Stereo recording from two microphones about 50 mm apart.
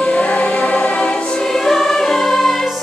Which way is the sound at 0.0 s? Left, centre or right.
Left.